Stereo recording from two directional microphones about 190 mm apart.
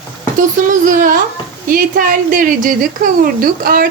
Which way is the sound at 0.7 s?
45° right (ahead or behind).